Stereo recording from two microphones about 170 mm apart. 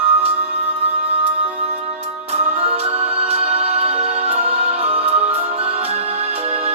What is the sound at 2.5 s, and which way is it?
Music, 40° right (ahead or behind).